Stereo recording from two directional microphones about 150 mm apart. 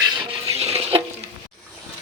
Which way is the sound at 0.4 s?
45° right (ahead or behind).